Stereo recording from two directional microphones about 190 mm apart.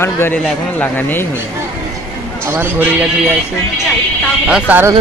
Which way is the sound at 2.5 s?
10° right (ahead or behind).